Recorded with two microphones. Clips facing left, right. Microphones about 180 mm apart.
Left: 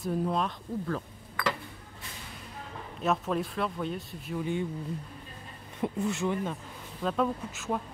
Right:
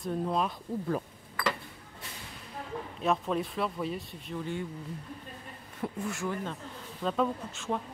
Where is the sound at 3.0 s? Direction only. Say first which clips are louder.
Left 1 dB; centre (ahead or behind).